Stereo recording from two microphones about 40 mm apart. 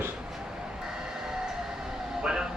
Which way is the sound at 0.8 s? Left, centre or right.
Centre.